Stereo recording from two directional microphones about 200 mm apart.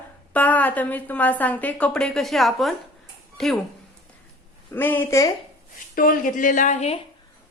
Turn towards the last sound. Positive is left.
turn(degrees=35)  # may be behind; listen again after turning